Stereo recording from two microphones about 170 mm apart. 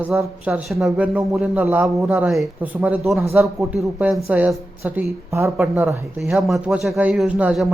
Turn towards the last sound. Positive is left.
turn(degrees=-5)  # may be behind; listen again after turning